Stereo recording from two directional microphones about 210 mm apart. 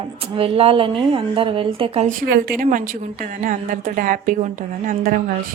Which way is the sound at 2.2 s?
45° right (ahead or behind).